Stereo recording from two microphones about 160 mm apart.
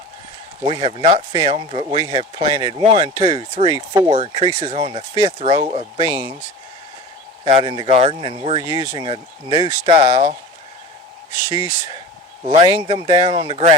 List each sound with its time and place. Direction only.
0.6 s speech: 35° right (ahead or behind)
7.4 s speech: 35° right (ahead or behind)
8.6 s speech: 25° right (ahead or behind)
11.4 s speech: 25° right (ahead or behind)